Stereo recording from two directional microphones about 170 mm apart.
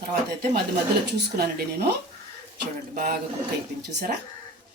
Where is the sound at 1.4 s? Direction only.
70° right (ahead or behind).